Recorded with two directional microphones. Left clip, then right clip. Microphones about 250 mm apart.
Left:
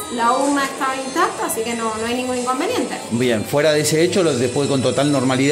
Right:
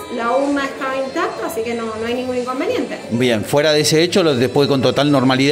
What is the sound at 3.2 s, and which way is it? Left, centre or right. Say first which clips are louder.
A man's voice: right 2 dB; centre.